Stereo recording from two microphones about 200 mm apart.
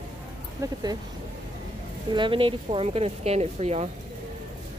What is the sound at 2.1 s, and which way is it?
Speech, 25° right (ahead or behind).